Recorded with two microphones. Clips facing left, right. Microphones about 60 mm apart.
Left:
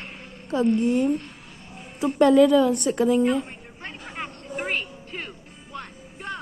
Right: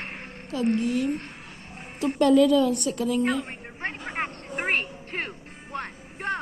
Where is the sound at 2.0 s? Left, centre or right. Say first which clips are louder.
Left 3 dB; centre.